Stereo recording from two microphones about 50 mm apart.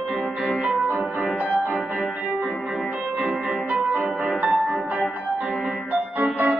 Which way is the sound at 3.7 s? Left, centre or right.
Right.